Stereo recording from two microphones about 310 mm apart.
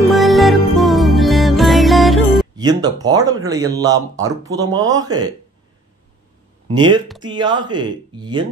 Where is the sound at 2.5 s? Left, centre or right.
Centre.